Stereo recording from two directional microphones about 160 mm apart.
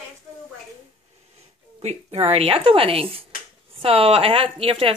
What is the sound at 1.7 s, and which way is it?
A woman's voice, 40° right (ahead or behind).